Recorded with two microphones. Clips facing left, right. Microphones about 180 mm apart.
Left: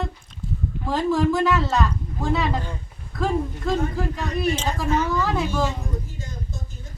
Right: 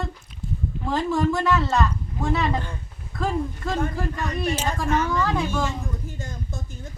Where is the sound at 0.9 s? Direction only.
Centre (ahead or behind).